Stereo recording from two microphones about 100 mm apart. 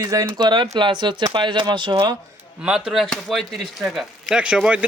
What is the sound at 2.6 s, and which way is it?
Speech, 5° right (ahead or behind).